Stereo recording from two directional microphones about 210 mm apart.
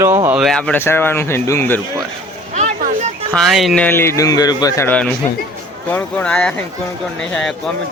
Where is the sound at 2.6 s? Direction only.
35° right (ahead or behind).